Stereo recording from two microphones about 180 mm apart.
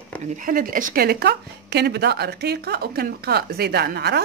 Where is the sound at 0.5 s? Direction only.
50° right (ahead or behind).